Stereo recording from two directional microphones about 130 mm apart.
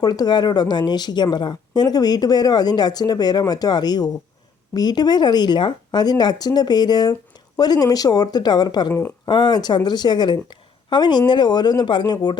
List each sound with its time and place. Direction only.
0.0 s speech: 30° left (ahead or behind)
8.9 s speech: 15° left (ahead or behind)
9.2 s a woman's voice: 35° left (ahead or behind)